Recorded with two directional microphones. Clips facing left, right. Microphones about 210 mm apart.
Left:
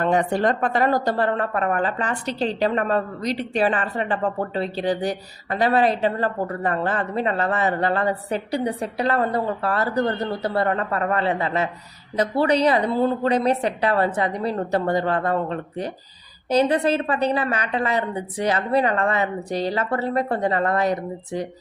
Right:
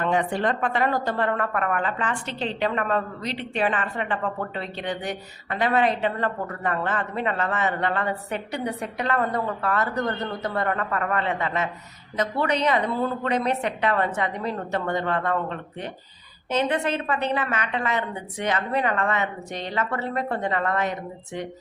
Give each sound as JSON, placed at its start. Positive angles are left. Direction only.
{"t": 0.0, "sound": "a woman's voice", "side_deg": 40}